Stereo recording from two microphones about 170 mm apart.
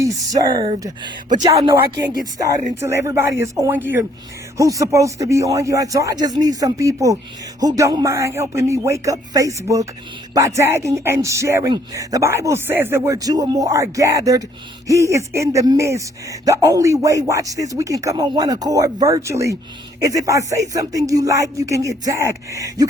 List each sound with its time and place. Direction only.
0.0 s speech: 20° right (ahead or behind)
2.8 s speech: 15° right (ahead or behind)